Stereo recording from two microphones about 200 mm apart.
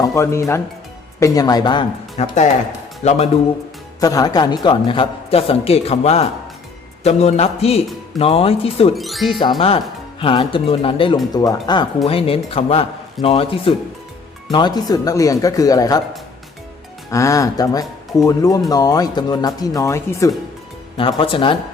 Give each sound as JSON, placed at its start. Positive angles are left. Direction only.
{"t": 0.0, "sound": "a man's voice", "side_deg": 15}
{"t": 2.2, "sound": "speech", "side_deg": 35}
{"t": 4.0, "sound": "a man's voice", "side_deg": 20}
{"t": 9.0, "sound": "speech", "side_deg": 0}
{"t": 9.4, "sound": "a man's voice", "side_deg": 25}
{"t": 17.1, "sound": "speech", "side_deg": 15}
{"t": 20.9, "sound": "a man's voice", "side_deg": 25}